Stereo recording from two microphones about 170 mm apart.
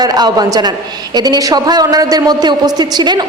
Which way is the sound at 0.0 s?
25° right (ahead or behind).